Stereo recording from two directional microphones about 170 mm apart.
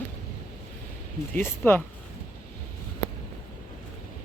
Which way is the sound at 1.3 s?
15° left (ahead or behind).